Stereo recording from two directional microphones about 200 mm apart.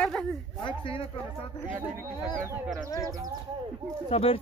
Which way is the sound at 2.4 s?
15° right (ahead or behind).